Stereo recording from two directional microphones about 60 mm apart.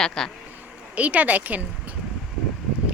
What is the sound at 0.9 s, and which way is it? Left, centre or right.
Speech, right.